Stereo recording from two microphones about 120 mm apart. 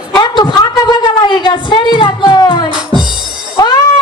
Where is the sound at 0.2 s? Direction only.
35° left (ahead or behind).